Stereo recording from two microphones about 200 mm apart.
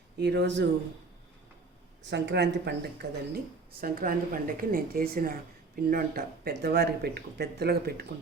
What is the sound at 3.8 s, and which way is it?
Speech, 45° right (ahead or behind).